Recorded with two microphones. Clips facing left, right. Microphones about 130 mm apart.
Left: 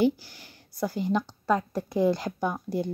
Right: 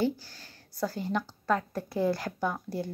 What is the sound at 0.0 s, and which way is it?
Speech, 15° left (ahead or behind).